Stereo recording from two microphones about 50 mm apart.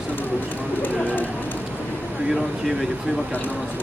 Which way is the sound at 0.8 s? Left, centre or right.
Left.